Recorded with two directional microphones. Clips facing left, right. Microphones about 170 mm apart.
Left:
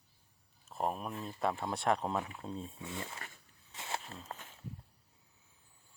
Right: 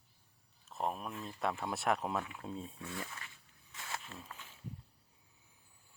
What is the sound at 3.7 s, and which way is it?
Walk, 30° left (ahead or behind).